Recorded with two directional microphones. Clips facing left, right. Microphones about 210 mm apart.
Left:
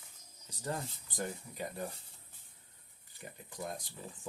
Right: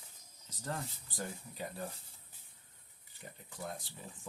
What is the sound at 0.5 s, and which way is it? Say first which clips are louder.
Speech: left 2 dB; 15° left (ahead or behind).